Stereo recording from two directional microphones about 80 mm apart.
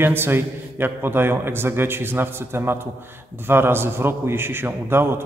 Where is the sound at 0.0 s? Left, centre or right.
Right.